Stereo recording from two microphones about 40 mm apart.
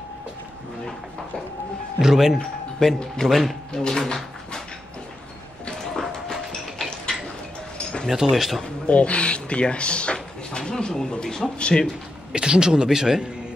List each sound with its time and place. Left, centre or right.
2.0 s a man's voice: centre
2.3 s speech: centre
3.7 s dog: centre
8.1 s a man's voice: centre
8.8 s speech: left
10.1 s a sound: centre
11.5 s speech: left
12.3 s a man's voice: right